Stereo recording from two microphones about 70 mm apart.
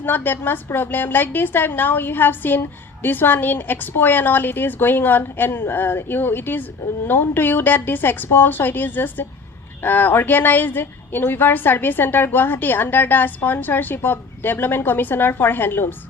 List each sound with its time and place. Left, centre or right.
0.0 s a woman's voice: left